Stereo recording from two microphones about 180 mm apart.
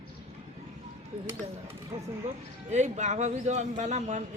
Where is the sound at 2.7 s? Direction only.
40° right (ahead or behind).